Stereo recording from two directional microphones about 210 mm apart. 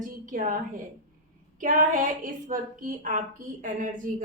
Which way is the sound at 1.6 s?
40° right (ahead or behind).